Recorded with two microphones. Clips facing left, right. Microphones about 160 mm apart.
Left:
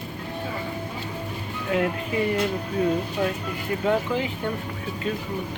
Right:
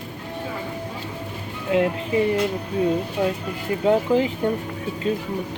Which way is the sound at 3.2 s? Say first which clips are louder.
Right 4 dB; 15° right (ahead or behind).